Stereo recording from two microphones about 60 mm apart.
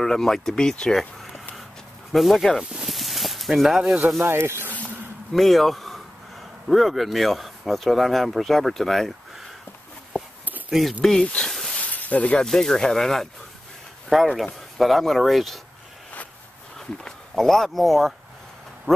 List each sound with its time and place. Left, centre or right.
0.0 s speech: centre
2.1 s speech: centre
2.7 s a sound: centre
4.2 s speech: right
5.3 s speech: centre
10.7 s speech: centre
11.0 s speech: centre
11.7 s a sound: left
12.4 s speech: centre
16.7 s speech: centre
18.9 s speech: right